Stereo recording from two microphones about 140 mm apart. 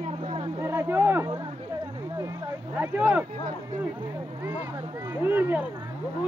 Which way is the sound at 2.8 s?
10° right (ahead or behind).